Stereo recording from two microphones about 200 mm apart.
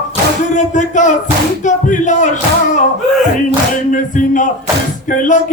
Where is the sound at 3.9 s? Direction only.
40° left (ahead or behind).